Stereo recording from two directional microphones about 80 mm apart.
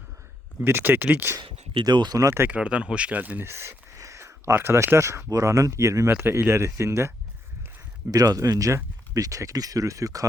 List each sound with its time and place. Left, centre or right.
0.6 s speech: right
1.7 s speech: right
2.1 s speech: right
2.5 s speech: centre; by 6.1 s right
6.1 s speech: right
8.1 s speech: right